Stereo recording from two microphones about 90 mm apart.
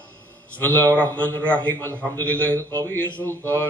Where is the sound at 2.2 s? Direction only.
15° left (ahead or behind).